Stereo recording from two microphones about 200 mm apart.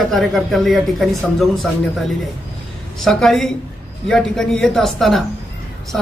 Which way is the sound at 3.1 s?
Centre (ahead or behind).